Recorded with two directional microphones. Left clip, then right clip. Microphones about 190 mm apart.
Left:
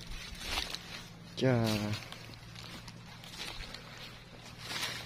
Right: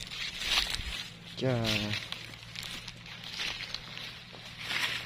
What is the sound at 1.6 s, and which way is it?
Speech, centre (ahead or behind).